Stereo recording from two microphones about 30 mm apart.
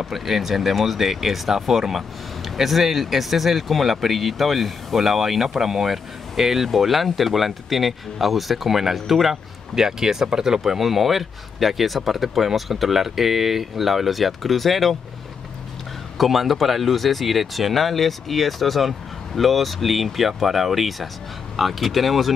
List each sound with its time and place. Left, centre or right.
0.0 s speech: centre
9.8 s speech: centre
10.6 s speech: centre
16.2 s speech: centre